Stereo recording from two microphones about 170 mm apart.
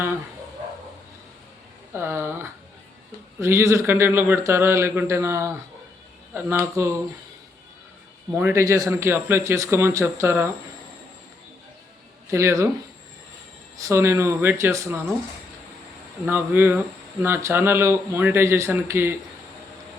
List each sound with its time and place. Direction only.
1.9 s speech: 15° right (ahead or behind)
8.4 s speech: 10° right (ahead or behind)
12.3 s speech: 15° right (ahead or behind)
13.7 s speech: 20° right (ahead or behind)
16.2 s speech: 10° right (ahead or behind)